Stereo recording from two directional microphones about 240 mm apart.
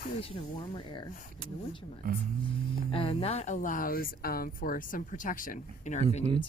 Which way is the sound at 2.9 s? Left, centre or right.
Left.